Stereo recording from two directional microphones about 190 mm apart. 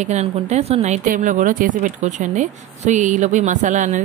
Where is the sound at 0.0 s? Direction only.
35° right (ahead or behind).